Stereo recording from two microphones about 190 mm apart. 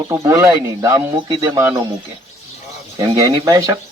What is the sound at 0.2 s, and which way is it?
Speech, 15° right (ahead or behind).